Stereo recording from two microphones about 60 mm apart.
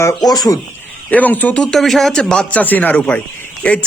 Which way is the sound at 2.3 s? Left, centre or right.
Left.